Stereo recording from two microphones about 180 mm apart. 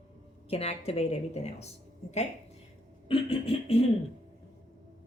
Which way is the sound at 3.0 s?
30° left (ahead or behind).